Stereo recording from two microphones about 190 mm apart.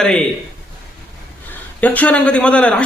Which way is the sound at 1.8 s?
10° left (ahead or behind).